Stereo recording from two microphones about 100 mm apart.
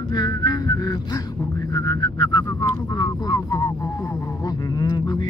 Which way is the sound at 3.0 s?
40° left (ahead or behind).